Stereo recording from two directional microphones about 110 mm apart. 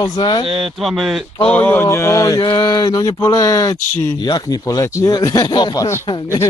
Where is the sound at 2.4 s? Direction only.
40° left (ahead or behind).